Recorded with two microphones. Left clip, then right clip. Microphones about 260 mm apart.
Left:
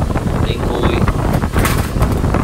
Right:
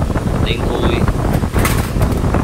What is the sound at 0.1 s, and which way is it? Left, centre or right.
Vehicle, centre.